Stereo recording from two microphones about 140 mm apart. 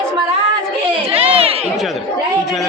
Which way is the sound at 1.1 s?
45° right (ahead or behind).